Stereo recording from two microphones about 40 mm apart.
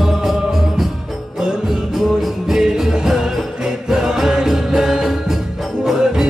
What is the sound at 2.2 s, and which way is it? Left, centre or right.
Music, centre.